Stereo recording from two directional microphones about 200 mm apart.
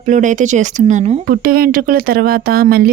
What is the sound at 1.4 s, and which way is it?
Speech, 45° right (ahead or behind).